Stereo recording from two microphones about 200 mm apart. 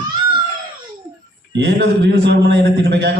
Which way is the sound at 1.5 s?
60° right (ahead or behind).